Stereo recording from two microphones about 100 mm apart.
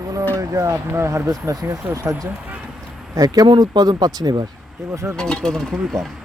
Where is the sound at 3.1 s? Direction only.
35° right (ahead or behind).